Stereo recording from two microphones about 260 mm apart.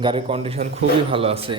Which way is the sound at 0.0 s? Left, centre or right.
Centre.